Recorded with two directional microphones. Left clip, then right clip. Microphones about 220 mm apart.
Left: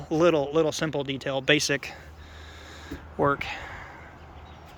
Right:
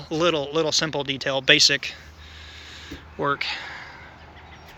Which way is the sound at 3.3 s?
15° left (ahead or behind).